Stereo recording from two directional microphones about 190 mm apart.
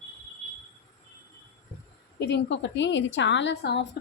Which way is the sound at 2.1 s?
65° left (ahead or behind).